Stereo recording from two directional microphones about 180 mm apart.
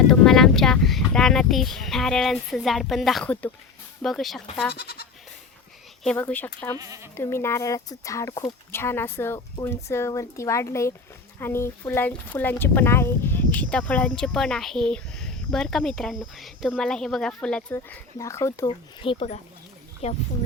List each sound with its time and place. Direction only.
0.1 s speech: centre (ahead or behind)
4.7 s goat: 65° left (ahead or behind)
6.0 s speech: 5° left (ahead or behind)
6.7 s speech: 20° right (ahead or behind)
7.2 s speech: 15° left (ahead or behind)
18.7 s speech: 30° left (ahead or behind)